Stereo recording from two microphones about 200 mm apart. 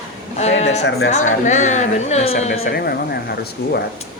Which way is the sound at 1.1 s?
35° left (ahead or behind).